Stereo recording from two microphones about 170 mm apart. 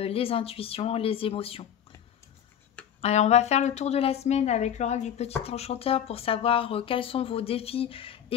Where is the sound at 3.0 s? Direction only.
40° left (ahead or behind).